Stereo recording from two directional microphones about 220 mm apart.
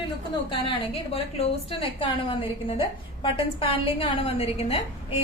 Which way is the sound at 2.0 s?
20° left (ahead or behind).